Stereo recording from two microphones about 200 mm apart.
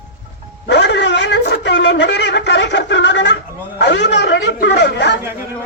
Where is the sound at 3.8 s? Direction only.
60° left (ahead or behind).